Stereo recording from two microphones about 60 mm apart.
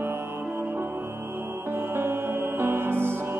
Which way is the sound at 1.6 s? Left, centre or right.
Right.